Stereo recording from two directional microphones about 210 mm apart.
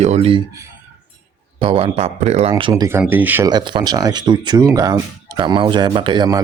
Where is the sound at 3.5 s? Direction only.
20° right (ahead or behind).